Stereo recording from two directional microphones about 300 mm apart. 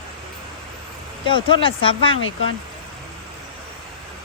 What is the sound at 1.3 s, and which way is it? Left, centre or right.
Speech, centre.